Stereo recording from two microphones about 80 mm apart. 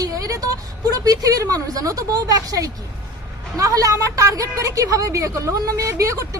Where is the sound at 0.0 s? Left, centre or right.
Right.